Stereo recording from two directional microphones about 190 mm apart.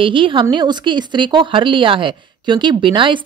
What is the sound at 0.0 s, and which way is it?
A woman's voice, 25° right (ahead or behind).